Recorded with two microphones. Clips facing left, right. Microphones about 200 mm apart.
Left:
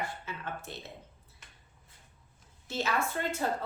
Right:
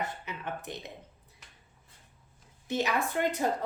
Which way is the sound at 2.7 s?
15° right (ahead or behind).